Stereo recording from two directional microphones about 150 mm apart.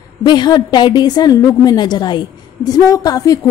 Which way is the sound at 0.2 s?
30° left (ahead or behind).